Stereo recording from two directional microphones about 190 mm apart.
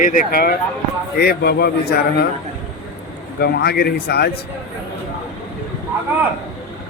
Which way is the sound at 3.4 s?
55° left (ahead or behind).